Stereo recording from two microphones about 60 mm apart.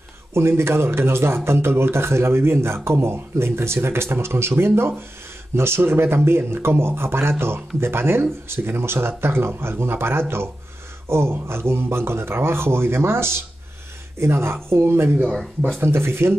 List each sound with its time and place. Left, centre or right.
0.3 s speech: right
15.3 s speech: centre
15.8 s speech: right